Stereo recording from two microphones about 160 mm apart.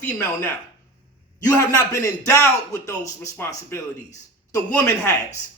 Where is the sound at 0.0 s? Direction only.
10° left (ahead or behind).